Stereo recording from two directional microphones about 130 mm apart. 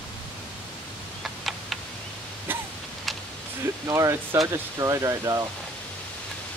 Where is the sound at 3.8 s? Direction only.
25° right (ahead or behind).